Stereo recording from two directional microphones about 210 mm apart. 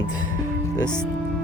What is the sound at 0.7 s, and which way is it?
Speech, 10° right (ahead or behind).